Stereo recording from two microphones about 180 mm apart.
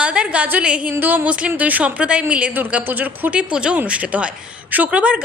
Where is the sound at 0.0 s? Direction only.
5° right (ahead or behind).